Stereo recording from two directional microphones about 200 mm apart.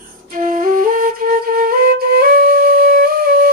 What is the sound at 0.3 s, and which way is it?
Flute, 45° right (ahead or behind).